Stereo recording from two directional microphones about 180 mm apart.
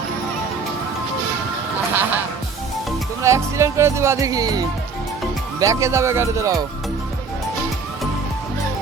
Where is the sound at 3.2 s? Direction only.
15° right (ahead or behind).